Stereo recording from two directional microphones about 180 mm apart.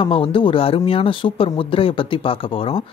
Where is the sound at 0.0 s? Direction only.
30° left (ahead or behind).